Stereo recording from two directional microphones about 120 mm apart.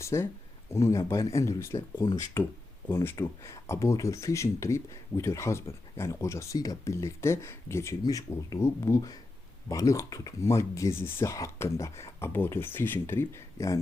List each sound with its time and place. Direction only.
0.0 s speech: 25° left (ahead or behind)